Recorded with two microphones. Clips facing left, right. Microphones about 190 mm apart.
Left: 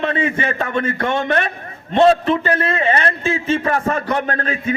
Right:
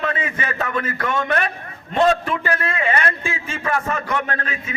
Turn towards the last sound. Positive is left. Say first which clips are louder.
# left 6 dB
turn(degrees=35)  # may be behind; listen again after turning